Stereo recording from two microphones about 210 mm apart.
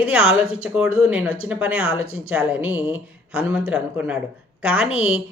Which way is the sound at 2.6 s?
25° left (ahead or behind).